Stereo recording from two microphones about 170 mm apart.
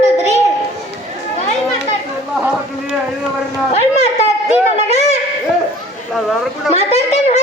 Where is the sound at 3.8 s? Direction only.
40° left (ahead or behind).